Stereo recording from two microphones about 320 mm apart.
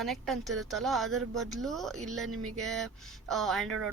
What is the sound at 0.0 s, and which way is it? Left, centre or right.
Speech, centre.